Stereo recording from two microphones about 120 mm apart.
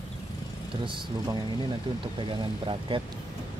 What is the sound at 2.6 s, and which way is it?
Speech, 45° right (ahead or behind).